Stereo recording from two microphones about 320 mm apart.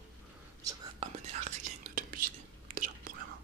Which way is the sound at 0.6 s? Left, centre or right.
Centre.